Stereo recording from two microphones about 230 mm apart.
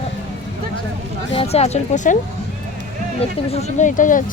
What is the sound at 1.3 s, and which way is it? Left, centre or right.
Speech, left.